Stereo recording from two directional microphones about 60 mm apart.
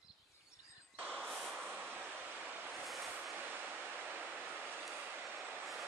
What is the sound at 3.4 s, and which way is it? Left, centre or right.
Waves, right.